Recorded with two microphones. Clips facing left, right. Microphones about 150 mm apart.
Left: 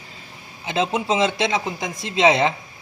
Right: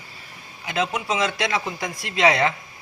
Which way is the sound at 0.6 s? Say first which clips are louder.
Left 3 dB; 25° left (ahead or behind).